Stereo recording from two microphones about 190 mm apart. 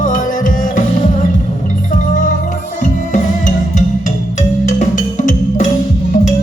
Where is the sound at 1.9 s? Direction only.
45° left (ahead or behind).